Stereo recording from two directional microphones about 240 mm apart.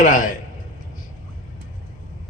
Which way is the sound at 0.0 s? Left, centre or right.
Left.